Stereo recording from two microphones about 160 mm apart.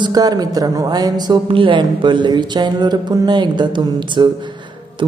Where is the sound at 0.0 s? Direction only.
25° right (ahead or behind).